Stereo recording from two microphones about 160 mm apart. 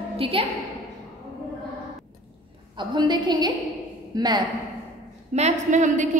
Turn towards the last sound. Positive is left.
turn(degrees=-50)  # may be behind; listen again after turning